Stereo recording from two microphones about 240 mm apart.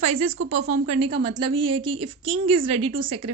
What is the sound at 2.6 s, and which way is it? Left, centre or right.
Speech, right.